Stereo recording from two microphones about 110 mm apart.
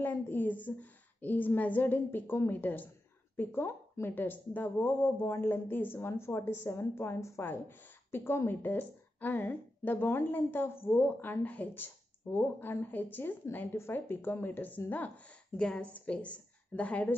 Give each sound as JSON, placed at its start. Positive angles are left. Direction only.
{"t": 0.0, "sound": "a woman's voice", "side_deg": 15}